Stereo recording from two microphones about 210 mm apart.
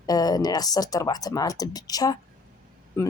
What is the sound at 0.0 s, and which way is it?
Speech, 20° left (ahead or behind).